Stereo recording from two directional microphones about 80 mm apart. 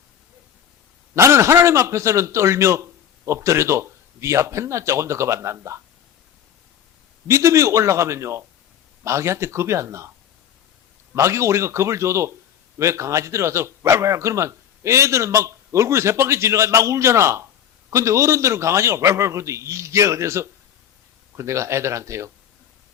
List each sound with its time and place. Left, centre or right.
1.1 s speech: right
7.3 s speech: right
11.1 s speech: right